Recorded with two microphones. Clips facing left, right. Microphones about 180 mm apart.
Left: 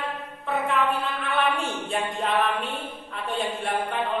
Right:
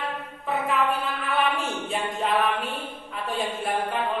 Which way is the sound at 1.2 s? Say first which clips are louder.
Even; centre (ahead or behind).